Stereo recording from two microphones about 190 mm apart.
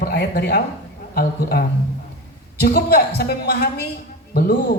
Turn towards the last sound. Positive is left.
turn(degrees=55)  # may be behind; listen again after turning